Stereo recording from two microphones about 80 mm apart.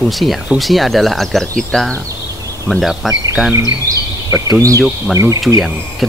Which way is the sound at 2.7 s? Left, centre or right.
Centre.